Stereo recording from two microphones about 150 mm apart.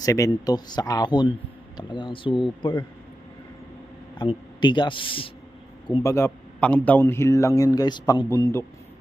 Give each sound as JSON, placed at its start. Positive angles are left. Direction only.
{"t": 0.0, "sound": "a man's voice", "side_deg": 25}
{"t": 4.2, "sound": "a man's voice", "side_deg": 30}
{"t": 6.0, "sound": "a man's voice", "side_deg": 20}